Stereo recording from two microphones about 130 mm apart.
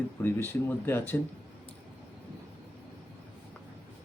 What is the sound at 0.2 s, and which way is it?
Speech, 15° left (ahead or behind).